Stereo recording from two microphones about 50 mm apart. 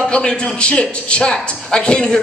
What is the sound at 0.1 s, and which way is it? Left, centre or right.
A man's voice, centre.